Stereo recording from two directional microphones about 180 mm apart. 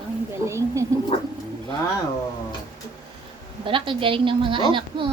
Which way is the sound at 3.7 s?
30° right (ahead or behind).